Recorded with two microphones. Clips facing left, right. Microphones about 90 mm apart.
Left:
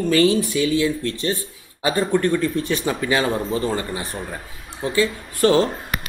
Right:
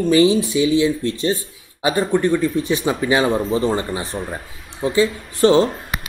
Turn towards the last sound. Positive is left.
turn(degrees=-25)  # may be behind; listen again after turning